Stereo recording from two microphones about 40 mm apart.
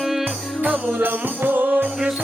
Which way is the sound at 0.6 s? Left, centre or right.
Right.